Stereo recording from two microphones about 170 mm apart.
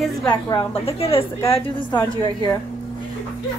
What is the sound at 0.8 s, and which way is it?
Speech, 35° left (ahead or behind).